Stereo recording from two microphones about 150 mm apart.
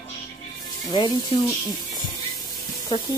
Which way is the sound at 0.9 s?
25° left (ahead or behind).